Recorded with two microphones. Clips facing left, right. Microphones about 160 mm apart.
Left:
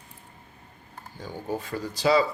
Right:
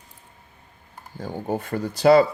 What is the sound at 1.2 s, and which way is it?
Speech, 55° right (ahead or behind).